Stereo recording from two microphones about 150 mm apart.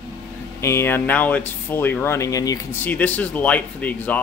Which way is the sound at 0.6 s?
15° left (ahead or behind).